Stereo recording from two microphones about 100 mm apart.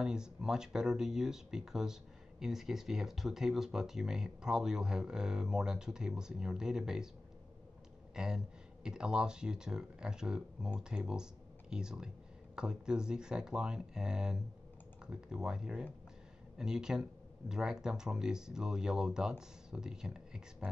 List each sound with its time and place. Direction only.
0.0 s speech: 5° right (ahead or behind)
8.1 s speech: 5° right (ahead or behind)